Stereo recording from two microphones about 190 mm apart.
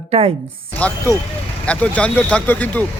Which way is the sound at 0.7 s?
10° left (ahead or behind).